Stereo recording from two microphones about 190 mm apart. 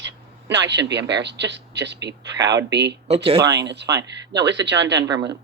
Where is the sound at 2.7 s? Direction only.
65° right (ahead or behind).